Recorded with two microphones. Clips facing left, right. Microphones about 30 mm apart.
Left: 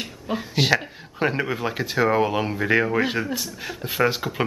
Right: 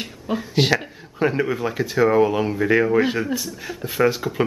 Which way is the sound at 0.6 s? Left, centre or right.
Centre.